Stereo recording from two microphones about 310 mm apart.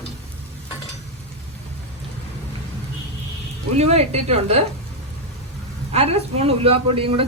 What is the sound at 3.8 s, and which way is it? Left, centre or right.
Speech, centre.